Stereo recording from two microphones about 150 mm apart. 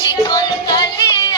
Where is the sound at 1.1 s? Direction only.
30° left (ahead or behind).